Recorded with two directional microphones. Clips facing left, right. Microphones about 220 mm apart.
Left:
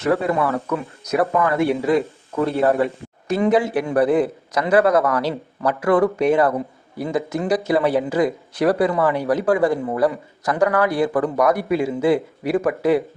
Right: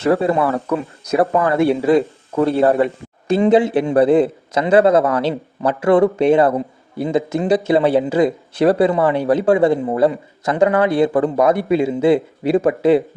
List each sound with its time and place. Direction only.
0.0 s speech: 30° right (ahead or behind)